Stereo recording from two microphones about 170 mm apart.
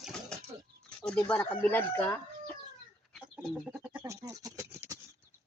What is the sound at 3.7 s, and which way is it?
Goat, 10° right (ahead or behind).